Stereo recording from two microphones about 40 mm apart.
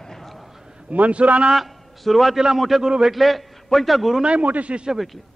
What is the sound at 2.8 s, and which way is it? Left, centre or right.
Speech, centre.